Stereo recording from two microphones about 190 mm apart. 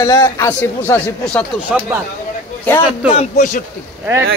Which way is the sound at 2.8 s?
30° left (ahead or behind).